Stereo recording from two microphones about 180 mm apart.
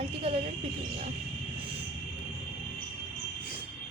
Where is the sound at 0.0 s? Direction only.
30° right (ahead or behind).